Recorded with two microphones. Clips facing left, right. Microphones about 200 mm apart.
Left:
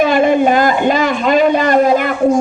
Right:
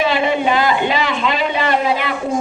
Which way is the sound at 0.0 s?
50° left (ahead or behind).